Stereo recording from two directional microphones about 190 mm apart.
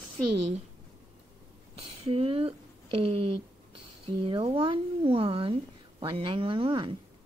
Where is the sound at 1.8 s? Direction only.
30° right (ahead or behind).